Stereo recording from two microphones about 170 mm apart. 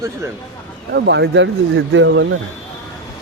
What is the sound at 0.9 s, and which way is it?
Speech, 90° right.